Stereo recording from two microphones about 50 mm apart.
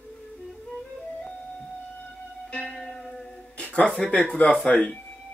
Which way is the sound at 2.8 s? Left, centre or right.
Centre.